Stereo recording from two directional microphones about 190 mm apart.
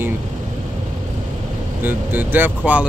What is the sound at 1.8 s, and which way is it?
Speech, 10° right (ahead or behind).